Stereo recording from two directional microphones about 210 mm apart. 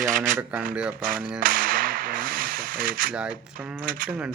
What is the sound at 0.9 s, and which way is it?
Speech, 40° right (ahead or behind).